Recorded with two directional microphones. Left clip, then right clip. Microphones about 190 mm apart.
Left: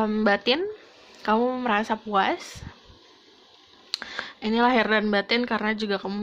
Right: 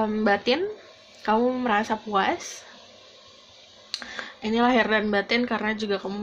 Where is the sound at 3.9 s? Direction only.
40° left (ahead or behind).